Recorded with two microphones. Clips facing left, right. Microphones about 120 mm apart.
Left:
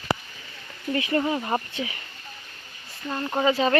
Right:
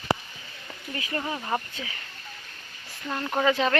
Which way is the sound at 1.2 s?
15° left (ahead or behind).